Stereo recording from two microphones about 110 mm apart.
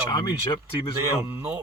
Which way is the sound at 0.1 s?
40° left (ahead or behind).